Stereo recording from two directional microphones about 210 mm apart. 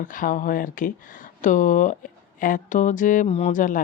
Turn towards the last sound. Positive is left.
turn(degrees=40)  # may be behind; listen again after turning